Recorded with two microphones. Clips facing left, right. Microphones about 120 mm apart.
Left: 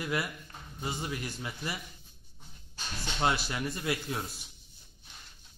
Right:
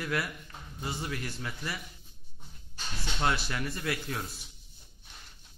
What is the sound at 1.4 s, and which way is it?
Speech, 15° left (ahead or behind).